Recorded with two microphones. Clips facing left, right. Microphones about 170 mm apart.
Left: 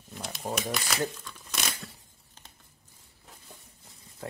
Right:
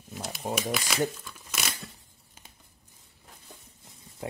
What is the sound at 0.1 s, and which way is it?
Crumpling, centre (ahead or behind).